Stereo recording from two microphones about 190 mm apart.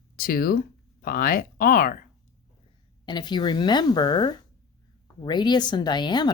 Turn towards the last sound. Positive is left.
turn(degrees=20)  # may be behind; listen again after turning